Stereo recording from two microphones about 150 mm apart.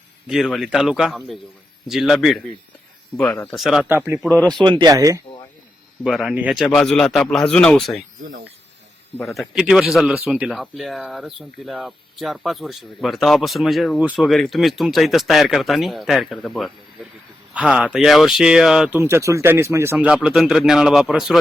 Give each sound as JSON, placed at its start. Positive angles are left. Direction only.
{"t": 0.3, "sound": "speech", "side_deg": 0}
{"t": 3.8, "sound": "a man's voice", "side_deg": -15}
{"t": 4.4, "sound": "speech", "side_deg": 5}
{"t": 4.6, "sound": "speech", "side_deg": -30}
{"t": 6.1, "sound": "a man's voice", "side_deg": 0}
{"t": 6.7, "sound": "speech", "side_deg": 5}
{"t": 9.2, "sound": "speech", "side_deg": 0}
{"t": 18.9, "sound": "a man's voice", "side_deg": -15}